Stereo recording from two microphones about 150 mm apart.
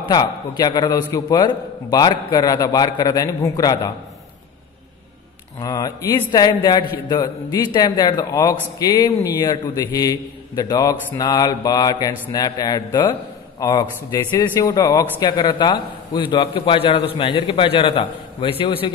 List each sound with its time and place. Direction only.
0.0 s a man's voice: 30° left (ahead or behind)
5.6 s a man's voice: 25° left (ahead or behind)